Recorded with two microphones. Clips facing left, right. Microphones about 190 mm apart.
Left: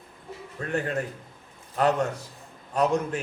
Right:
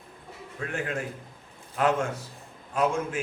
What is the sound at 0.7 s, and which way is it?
A man's voice, 40° left (ahead or behind).